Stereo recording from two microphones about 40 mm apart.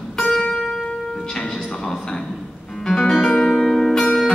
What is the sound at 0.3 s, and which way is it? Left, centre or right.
Music, left.